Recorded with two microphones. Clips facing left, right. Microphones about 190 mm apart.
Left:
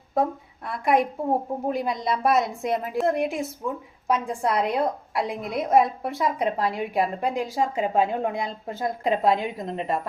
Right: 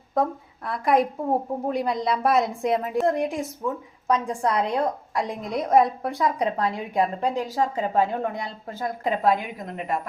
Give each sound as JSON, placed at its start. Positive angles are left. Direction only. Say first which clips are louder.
{"t": 0.2, "sound": "a woman's voice", "louder": "even", "side_deg": 0}